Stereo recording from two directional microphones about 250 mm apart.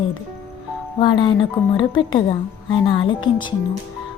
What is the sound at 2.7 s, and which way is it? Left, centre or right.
Speech, centre.